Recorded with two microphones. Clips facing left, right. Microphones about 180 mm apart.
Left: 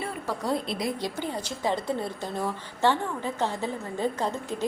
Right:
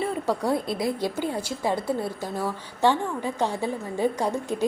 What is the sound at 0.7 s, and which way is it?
Speech, 50° right (ahead or behind).